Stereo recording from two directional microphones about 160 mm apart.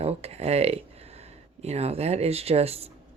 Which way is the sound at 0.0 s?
40° right (ahead or behind).